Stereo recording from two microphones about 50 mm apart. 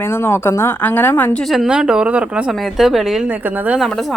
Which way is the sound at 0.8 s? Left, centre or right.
Left.